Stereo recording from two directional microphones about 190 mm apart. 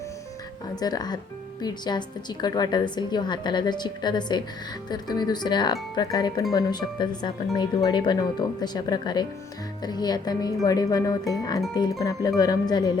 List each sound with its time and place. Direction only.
0.8 s a woman's voice: 20° left (ahead or behind)